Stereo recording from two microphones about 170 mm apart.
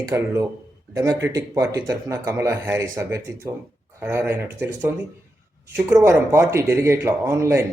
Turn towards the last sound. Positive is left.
turn(degrees=-15)  # may be behind; listen again after turning